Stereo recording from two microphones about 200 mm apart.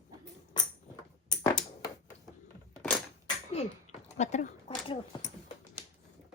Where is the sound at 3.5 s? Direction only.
35° left (ahead or behind).